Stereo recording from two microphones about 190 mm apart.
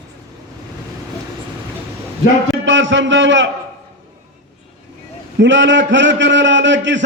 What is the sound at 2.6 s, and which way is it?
Speech, 80° right.